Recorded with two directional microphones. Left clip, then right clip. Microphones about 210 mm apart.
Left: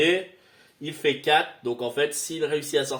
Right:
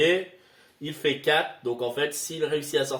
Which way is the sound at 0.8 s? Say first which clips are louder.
Left 1 dB; 30° left (ahead or behind).